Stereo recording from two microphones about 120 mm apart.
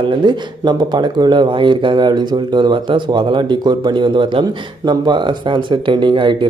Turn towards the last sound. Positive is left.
turn(degrees=-45)  # may be behind; listen again after turning